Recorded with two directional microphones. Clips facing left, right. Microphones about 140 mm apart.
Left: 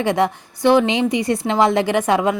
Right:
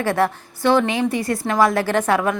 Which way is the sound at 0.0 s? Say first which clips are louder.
Left 1 dB; 15° left (ahead or behind).